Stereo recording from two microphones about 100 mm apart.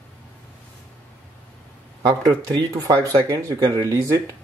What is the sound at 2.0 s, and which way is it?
Speech, 40° right (ahead or behind).